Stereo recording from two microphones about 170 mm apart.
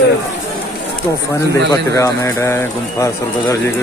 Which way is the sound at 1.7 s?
15° left (ahead or behind).